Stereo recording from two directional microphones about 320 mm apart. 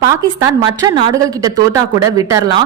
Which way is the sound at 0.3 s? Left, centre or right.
Centre.